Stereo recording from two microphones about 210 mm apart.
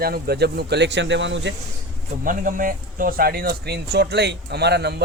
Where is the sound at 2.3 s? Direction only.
40° right (ahead or behind).